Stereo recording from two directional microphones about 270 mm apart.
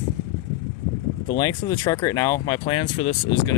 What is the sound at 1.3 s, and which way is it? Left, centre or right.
Speech, centre.